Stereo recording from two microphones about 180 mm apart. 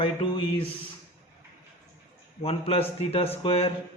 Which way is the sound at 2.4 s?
30° left (ahead or behind).